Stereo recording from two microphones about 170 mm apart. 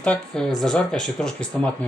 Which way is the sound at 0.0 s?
5° left (ahead or behind).